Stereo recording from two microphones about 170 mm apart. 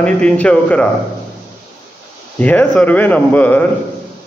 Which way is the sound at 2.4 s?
10° left (ahead or behind).